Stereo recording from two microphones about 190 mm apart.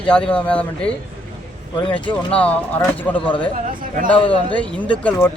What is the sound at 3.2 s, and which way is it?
Speech, 25° left (ahead or behind).